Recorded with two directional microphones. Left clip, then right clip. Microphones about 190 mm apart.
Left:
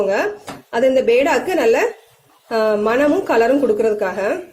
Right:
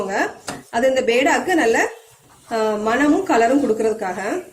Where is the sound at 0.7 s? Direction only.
45° left (ahead or behind).